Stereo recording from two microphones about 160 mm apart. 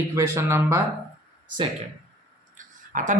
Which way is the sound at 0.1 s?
15° right (ahead or behind).